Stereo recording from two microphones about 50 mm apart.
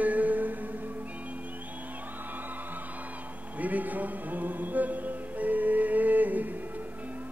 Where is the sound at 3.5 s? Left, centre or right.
Right.